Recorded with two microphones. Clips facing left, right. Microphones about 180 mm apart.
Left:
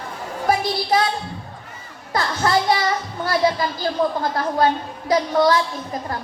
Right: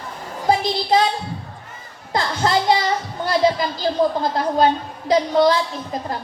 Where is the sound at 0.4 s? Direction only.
20° right (ahead or behind).